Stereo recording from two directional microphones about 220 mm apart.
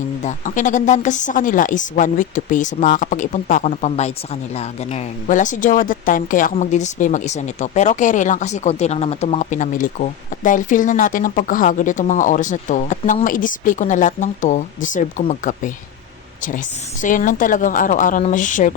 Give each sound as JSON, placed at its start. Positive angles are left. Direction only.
{"t": 0.2, "sound": "a woman's voice", "side_deg": 35}